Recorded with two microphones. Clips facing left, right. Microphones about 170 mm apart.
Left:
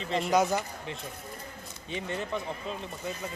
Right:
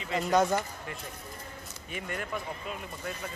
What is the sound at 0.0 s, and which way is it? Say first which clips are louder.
Speech: left 2 dB; 30° left (ahead or behind).